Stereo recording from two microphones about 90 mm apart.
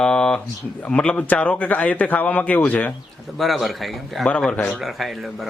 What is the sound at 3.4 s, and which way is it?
Speech, centre (ahead or behind).